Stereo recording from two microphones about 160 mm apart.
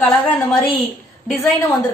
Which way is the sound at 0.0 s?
10° left (ahead or behind).